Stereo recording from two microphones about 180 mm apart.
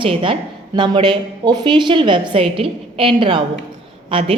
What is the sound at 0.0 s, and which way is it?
A woman's voice, 30° right (ahead or behind).